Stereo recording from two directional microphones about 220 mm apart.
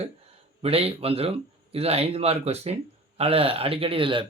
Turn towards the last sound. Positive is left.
turn(degrees=-25)  # may be behind; listen again after turning